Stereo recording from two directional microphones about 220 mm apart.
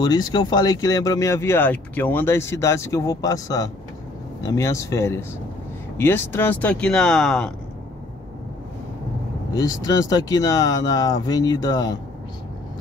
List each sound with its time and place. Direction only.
0.0 s speech: 20° left (ahead or behind); by 7.5 s centre (ahead or behind)
9.5 s speech: 15° left (ahead or behind)